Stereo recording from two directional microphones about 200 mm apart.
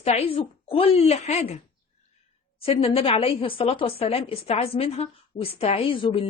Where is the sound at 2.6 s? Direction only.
30° left (ahead or behind).